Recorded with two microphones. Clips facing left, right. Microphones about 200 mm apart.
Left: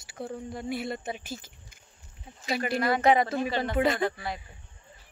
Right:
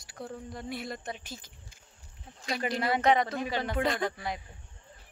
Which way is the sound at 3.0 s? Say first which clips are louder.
Left 3 dB; 5° left (ahead or behind).